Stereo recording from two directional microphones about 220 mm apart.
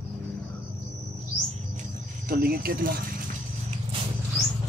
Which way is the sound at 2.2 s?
40° right (ahead or behind).